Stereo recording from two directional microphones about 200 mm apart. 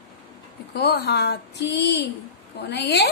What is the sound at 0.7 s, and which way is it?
Speech, 50° left (ahead or behind).